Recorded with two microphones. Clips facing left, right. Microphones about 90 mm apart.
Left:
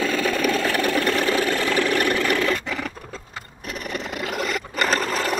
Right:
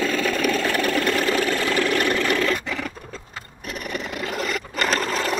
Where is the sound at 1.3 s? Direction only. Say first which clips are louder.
Even; 25° left (ahead or behind).